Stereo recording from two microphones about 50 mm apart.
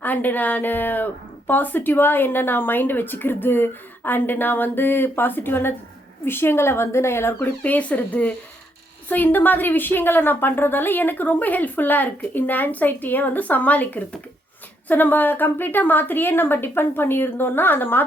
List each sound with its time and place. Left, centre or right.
0.0 s speech: left
7.6 s a woman's voice: left